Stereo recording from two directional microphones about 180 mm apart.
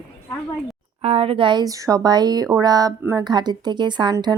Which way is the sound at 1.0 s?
30° right (ahead or behind).